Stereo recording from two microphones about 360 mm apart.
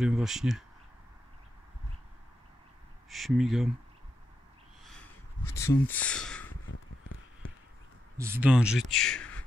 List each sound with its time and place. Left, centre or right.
0.0 s speech: centre
3.1 s speech: centre
4.8 s a sound: centre
8.2 s speech: centre